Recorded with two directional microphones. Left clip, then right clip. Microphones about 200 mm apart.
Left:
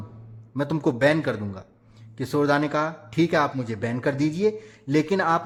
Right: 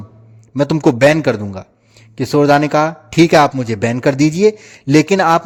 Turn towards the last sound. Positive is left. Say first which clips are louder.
# right 11 dB
turn(degrees=-40)  # may be behind; listen again after turning